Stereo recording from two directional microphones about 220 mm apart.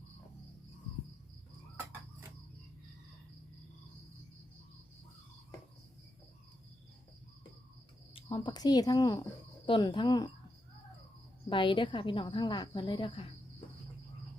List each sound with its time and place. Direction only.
8.1 s speech: 20° left (ahead or behind)
11.4 s speech: 20° left (ahead or behind)